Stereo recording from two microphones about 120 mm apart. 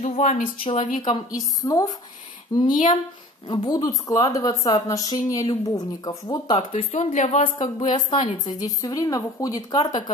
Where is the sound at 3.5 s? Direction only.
35° left (ahead or behind).